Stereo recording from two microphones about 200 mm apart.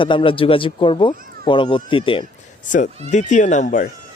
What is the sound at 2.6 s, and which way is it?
Speech, 40° left (ahead or behind).